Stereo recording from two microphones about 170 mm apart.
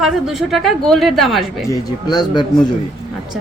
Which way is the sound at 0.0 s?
Centre (ahead or behind).